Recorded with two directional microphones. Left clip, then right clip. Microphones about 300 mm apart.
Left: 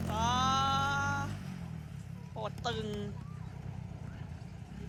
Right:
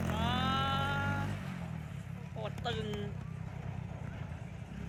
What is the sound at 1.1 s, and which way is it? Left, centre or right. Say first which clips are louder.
Music: left 3 dB; centre.